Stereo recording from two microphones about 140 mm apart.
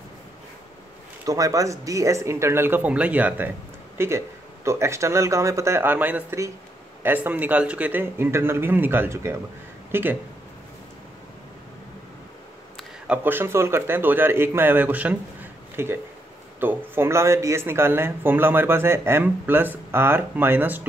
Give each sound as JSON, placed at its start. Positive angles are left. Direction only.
{"t": 1.2, "sound": "speech", "side_deg": -25}
{"t": 13.0, "sound": "speech", "side_deg": -10}